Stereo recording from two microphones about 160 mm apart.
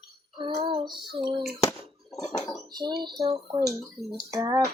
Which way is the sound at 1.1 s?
30° right (ahead or behind).